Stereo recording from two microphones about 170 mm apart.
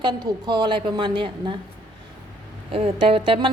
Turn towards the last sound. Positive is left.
turn(degrees=-30)  # may be behind; listen again after turning